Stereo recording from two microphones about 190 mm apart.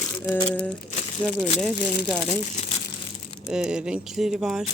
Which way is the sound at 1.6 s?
Centre (ahead or behind).